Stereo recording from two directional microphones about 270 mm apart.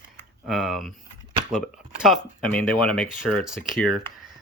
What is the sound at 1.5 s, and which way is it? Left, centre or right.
Speech, centre.